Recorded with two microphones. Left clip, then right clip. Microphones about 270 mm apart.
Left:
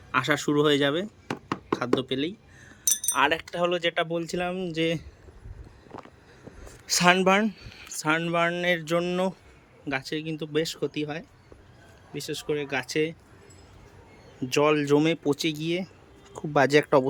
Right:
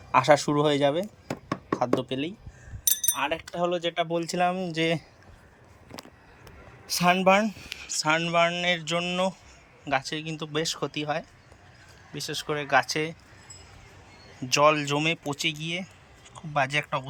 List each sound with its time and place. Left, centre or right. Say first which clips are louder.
0.1 s speech: right 4 dB; centre
6.8 s speech: left 1 dB; centre
14.3 s speech: right 2 dB; centre